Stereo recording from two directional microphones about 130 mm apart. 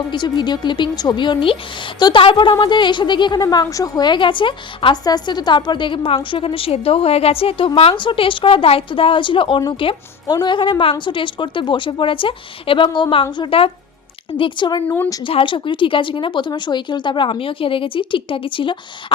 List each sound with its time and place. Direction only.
0.1 s a woman's voice: 35° left (ahead or behind)
14.8 s a woman's voice: 15° left (ahead or behind)
15.3 s a woman's voice: 45° left (ahead or behind)